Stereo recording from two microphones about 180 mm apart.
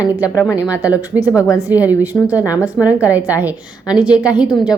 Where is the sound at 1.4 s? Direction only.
20° left (ahead or behind).